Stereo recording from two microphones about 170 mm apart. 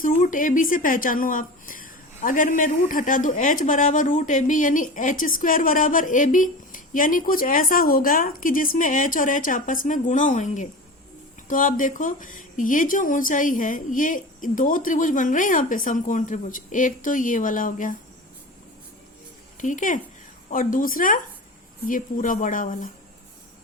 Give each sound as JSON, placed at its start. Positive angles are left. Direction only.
{"t": 0.0, "sound": "a woman's voice", "side_deg": 50}
{"t": 19.6, "sound": "a woman's voice", "side_deg": 50}